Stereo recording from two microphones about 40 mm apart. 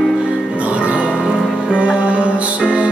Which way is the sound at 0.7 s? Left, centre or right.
Right.